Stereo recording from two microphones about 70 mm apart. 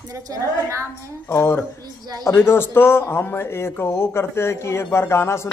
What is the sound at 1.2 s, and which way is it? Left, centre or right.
Speech, left.